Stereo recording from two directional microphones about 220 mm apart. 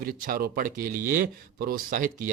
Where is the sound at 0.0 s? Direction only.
40° right (ahead or behind).